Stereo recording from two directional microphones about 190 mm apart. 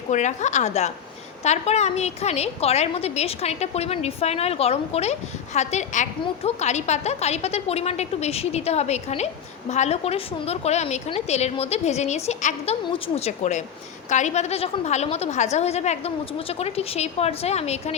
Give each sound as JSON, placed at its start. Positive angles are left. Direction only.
{"t": 0.1, "sound": "a woman's voice", "side_deg": 40}